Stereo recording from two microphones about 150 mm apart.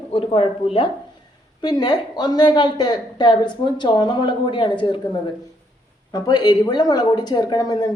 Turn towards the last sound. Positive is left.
turn(degrees=25)  # may be behind; listen again after turning